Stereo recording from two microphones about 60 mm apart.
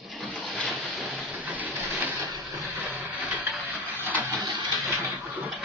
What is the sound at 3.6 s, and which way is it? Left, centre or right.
Printer, right.